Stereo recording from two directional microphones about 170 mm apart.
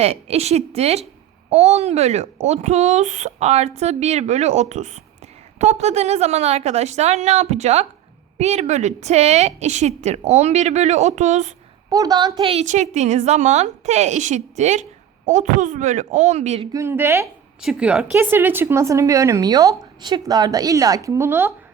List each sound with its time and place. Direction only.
0.0 s a child's voice: 35° right (ahead or behind)
11.9 s a child's voice: 20° right (ahead or behind); by 16.6 s 40° right (ahead or behind)
16.7 s a woman's voice: 15° right (ahead or behind)